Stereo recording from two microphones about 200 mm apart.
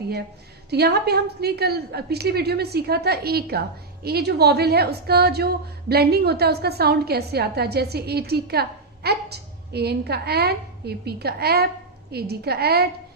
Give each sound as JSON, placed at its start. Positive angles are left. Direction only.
{"t": 0.7, "sound": "a woman's voice", "side_deg": -55}